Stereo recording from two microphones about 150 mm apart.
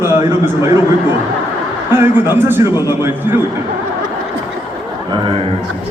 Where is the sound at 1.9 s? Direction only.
15° right (ahead or behind).